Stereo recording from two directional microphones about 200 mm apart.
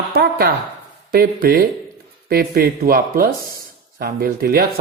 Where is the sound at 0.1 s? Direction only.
55° right (ahead or behind).